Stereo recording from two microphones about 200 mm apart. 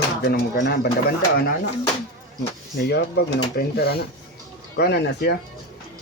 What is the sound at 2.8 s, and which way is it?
Speech, 55° left (ahead or behind).